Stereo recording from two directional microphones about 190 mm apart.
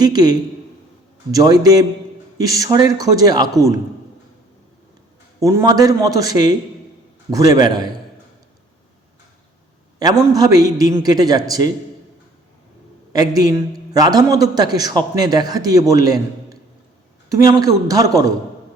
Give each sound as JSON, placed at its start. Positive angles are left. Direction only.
{"t": 0.0, "sound": "a man's voice", "side_deg": -20}
{"t": 5.4, "sound": "a man's voice", "side_deg": -15}
{"t": 10.0, "sound": "a man's voice", "side_deg": -20}
{"t": 13.1, "sound": "a man's voice", "side_deg": -20}